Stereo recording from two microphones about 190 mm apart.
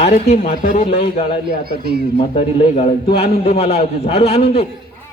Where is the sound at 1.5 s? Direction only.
55° right (ahead or behind).